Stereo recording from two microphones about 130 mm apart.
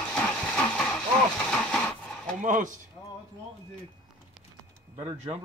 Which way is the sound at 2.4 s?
85° right.